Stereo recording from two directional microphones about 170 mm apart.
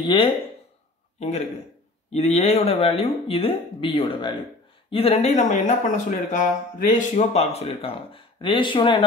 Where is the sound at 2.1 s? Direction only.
35° left (ahead or behind).